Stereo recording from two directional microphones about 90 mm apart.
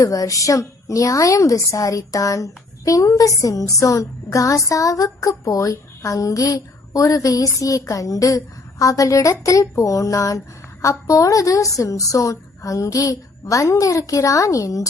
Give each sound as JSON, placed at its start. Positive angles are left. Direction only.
{"t": 0.0, "sound": "a woman's voice", "side_deg": 40}